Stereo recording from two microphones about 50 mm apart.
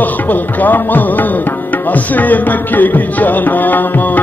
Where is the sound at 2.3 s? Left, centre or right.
Left.